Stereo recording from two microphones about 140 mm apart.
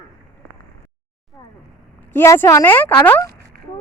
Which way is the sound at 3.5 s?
90° right.